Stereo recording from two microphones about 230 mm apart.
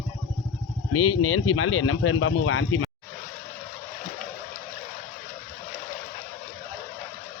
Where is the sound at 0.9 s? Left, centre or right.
Left.